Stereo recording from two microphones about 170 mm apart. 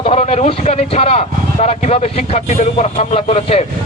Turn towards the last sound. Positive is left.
turn(degrees=40)  # may be behind; listen again after turning